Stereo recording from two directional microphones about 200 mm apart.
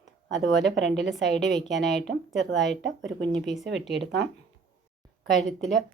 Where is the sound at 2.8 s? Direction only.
65° right (ahead or behind).